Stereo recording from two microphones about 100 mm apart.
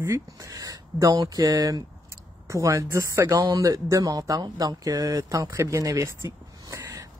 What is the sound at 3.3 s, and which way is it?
Speech, 40° right (ahead or behind).